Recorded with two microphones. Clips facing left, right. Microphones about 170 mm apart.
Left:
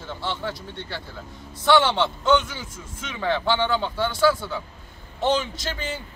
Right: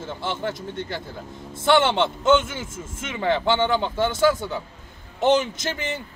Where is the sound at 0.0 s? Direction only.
20° right (ahead or behind).